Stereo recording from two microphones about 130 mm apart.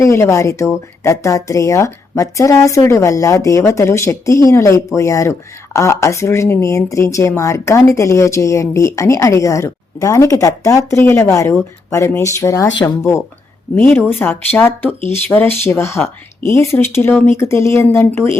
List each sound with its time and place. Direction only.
0.0 s speech: 20° left (ahead or behind)